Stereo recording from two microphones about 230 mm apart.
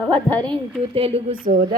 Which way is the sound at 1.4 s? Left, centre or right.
Right.